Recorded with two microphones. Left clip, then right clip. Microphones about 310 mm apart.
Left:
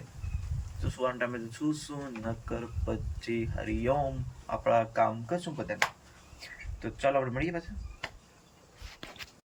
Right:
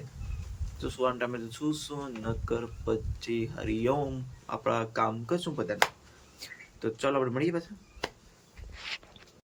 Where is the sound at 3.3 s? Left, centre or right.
Centre.